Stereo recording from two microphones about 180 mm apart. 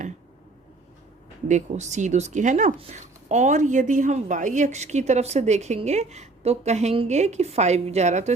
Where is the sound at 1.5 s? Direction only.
40° right (ahead or behind).